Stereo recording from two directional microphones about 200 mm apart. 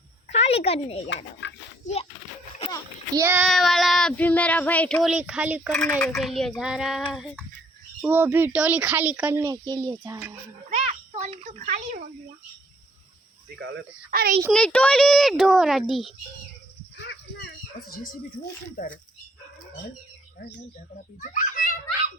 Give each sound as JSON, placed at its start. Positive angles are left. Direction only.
{"t": 0.3, "sound": "speech", "side_deg": 30}
{"t": 1.1, "sound": "speech", "side_deg": 65}
{"t": 3.1, "sound": "speech", "side_deg": -10}
{"t": 3.5, "sound": "speech", "side_deg": 0}
{"t": 10.7, "sound": "a sound", "side_deg": -35}
{"t": 14.1, "sound": "a child's voice", "side_deg": -45}
{"t": 14.5, "sound": "speech", "side_deg": 5}
{"t": 17.0, "sound": "speech", "side_deg": 60}
{"t": 21.2, "sound": "children playing", "side_deg": 40}